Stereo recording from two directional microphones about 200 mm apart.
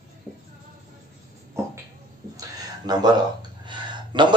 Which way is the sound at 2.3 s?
20° right (ahead or behind).